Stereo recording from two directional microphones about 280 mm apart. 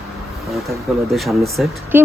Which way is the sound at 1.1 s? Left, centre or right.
Centre.